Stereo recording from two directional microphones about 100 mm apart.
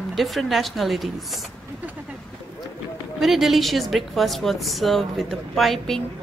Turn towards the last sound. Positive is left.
turn(degrees=0)  # may be behind; listen again after turning